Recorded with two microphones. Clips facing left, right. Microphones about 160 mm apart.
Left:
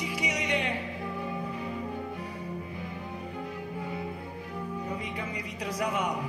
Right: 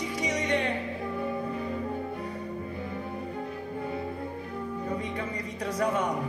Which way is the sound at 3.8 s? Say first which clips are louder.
Right 4 dB; 35° right (ahead or behind).